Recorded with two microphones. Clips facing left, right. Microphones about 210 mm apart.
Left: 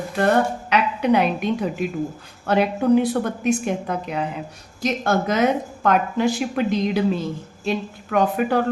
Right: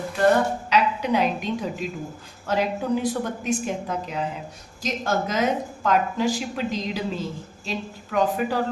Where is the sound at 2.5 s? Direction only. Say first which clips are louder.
Left 6 dB; 60° left (ahead or behind).